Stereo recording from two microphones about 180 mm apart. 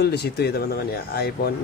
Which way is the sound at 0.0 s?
65° left (ahead or behind).